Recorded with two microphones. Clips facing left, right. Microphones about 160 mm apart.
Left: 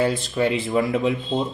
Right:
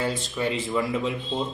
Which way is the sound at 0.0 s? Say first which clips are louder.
Left 6 dB; 65° left (ahead or behind).